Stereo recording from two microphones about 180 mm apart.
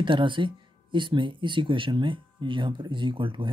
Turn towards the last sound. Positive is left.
turn(degrees=-30)  # may be behind; listen again after turning